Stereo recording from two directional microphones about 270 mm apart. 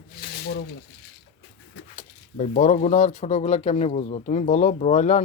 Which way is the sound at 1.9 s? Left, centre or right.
Left.